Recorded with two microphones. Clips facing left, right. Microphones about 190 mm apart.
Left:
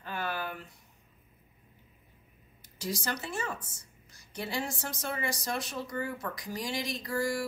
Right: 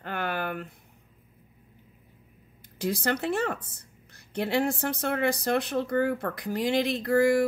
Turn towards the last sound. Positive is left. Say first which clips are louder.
# right 10 dB
turn(degrees=-60)  # may be behind; listen again after turning